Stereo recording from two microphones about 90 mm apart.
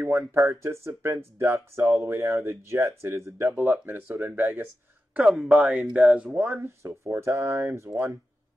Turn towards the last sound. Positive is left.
turn(degrees=-30)  # may be behind; listen again after turning